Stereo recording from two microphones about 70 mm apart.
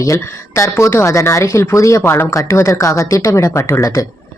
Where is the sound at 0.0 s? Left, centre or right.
Left.